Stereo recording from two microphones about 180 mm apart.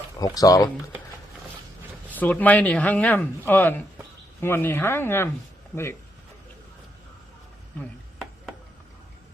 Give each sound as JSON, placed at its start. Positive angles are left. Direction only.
{"t": 0.2, "sound": "speech", "side_deg": 20}
{"t": 2.0, "sound": "speech", "side_deg": 10}
{"t": 7.8, "sound": "chopping", "side_deg": 0}